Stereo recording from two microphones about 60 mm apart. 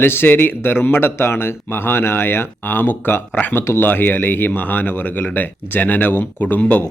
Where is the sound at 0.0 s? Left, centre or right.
Left.